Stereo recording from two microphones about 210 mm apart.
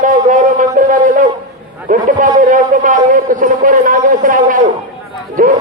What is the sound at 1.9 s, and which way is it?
A man's voice, 40° right (ahead or behind).